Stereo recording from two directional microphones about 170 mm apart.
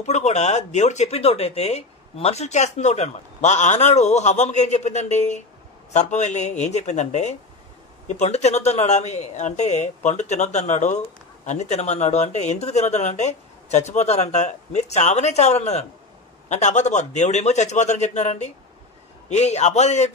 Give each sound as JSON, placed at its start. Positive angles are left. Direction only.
{"t": 0.0, "sound": "speech", "side_deg": 40}